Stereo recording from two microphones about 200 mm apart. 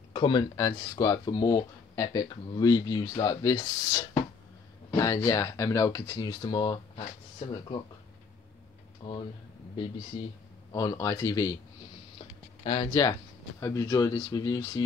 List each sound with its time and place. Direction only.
0.1 s speech: 25° left (ahead or behind)
9.0 s speech: 25° left (ahead or behind)
12.6 s speech: 20° left (ahead or behind)